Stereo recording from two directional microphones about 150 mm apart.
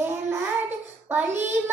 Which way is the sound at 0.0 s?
15° right (ahead or behind).